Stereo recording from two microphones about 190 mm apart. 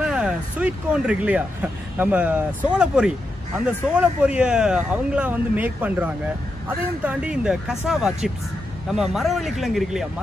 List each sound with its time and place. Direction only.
0.0 s speech: 5° right (ahead or behind)
7.1 s speech: 5° right (ahead or behind)